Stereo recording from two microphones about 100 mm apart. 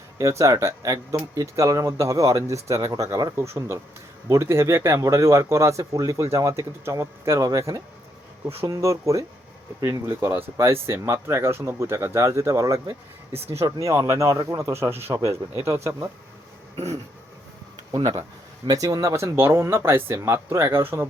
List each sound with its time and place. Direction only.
0.2 s speech: 35° right (ahead or behind)
3.3 s speech: 25° right (ahead or behind)
17.9 s speech: 40° right (ahead or behind); by 21.1 s 25° right (ahead or behind)